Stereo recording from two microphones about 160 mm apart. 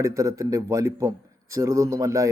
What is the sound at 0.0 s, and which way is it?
Speech, 20° right (ahead or behind).